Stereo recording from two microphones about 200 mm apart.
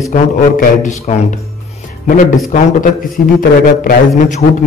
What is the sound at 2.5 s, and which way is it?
A man's voice, 45° left (ahead or behind).